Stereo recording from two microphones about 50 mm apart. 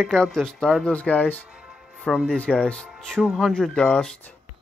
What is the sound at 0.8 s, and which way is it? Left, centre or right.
Speech, left.